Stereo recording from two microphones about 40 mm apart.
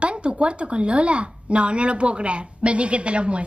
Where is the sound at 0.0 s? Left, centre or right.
Right.